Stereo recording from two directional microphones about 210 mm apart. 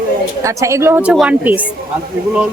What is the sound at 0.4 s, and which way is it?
Speech, 15° right (ahead or behind).